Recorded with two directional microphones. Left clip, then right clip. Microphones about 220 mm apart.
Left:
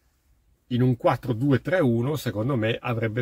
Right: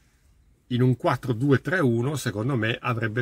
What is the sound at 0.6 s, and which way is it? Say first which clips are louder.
Speech: left 1 dB; 5° right (ahead or behind).